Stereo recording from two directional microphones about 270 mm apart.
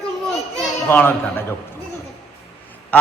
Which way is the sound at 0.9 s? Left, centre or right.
Centre.